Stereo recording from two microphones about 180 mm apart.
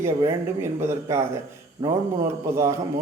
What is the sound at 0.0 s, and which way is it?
A man's voice, 15° right (ahead or behind).